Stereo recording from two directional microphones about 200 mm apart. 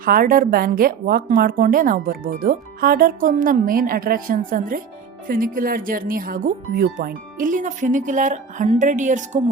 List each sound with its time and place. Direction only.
0.0 s a woman's voice: 45° right (ahead or behind)